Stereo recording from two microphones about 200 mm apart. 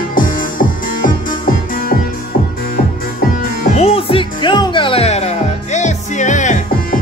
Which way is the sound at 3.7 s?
30° left (ahead or behind).